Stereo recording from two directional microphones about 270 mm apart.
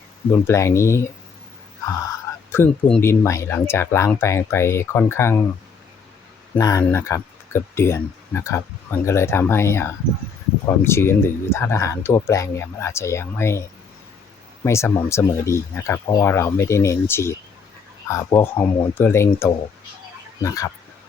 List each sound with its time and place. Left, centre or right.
0.3 s speech: centre
2.5 s speech: centre
6.6 s speech: centre
14.6 s speech: centre